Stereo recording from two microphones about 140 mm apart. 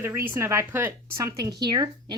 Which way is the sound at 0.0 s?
20° right (ahead or behind).